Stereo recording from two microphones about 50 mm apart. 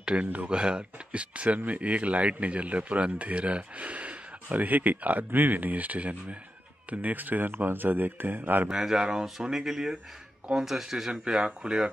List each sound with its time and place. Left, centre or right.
0.0 s a man's voice: centre; by 8.6 s right
8.6 s speech: centre